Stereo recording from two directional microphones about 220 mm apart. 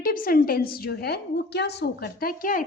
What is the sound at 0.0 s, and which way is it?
A woman's voice, 40° left (ahead or behind).